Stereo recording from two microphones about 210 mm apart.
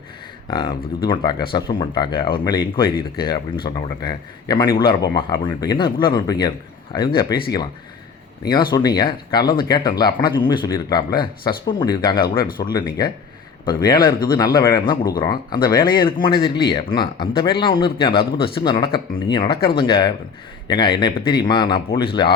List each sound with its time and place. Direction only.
0.4 s speech: 20° left (ahead or behind)
8.4 s speech: 20° left (ahead or behind)